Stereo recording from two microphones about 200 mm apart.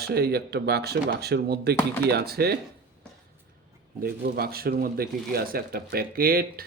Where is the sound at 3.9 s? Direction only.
50° right (ahead or behind).